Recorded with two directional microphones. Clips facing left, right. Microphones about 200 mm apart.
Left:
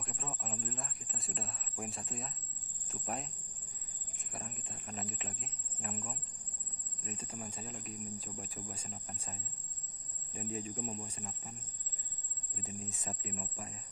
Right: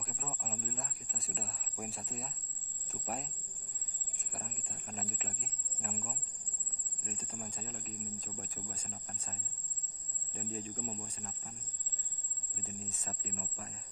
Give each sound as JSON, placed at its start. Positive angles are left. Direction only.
{"t": 0.0, "sound": "a sound", "side_deg": 0}
{"t": 2.9, "sound": "cricket", "side_deg": 0}
{"t": 7.1, "sound": "speech", "side_deg": 5}
{"t": 12.6, "sound": "speech", "side_deg": 15}